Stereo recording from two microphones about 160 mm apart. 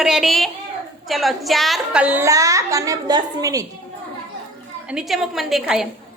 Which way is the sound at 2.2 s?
20° right (ahead or behind).